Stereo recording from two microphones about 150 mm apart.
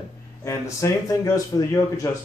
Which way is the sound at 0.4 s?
20° left (ahead or behind).